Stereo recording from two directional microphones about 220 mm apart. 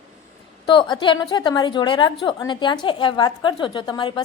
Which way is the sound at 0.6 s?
20° left (ahead or behind).